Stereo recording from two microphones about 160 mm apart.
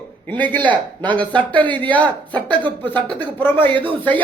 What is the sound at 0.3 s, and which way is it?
Speech, 10° left (ahead or behind).